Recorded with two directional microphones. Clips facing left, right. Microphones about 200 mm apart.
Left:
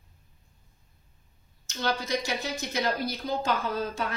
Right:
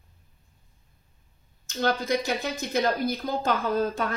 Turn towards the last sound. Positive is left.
turn(degrees=-50)  # may be behind; listen again after turning